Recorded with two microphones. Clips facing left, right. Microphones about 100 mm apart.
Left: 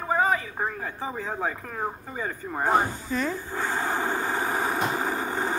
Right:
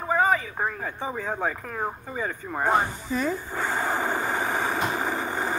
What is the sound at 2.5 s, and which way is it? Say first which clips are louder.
Speech: even; centre (ahead or behind).